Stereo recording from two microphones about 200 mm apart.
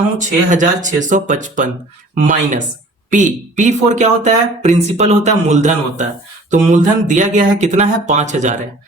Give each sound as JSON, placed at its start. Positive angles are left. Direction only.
{"t": 0.2, "sound": "speech", "side_deg": -40}